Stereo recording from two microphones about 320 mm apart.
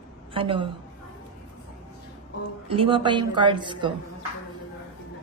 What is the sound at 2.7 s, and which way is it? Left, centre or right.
A woman's voice, centre.